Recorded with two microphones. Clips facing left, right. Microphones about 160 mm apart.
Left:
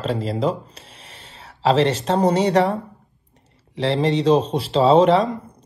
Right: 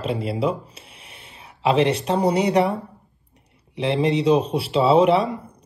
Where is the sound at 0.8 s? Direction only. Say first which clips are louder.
Left 2 dB; 35° left (ahead or behind).